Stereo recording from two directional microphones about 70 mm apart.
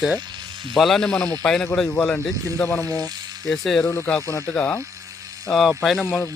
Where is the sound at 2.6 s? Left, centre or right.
Left.